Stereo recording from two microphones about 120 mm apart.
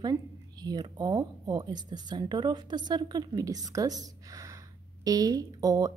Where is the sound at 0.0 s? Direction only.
35° right (ahead or behind).